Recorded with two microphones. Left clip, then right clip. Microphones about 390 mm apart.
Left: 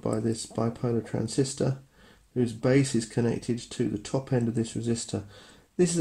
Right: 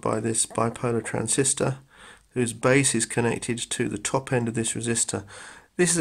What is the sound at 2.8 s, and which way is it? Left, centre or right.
Speech, centre.